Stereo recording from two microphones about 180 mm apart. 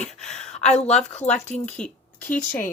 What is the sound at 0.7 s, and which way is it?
Speech, 40° left (ahead or behind).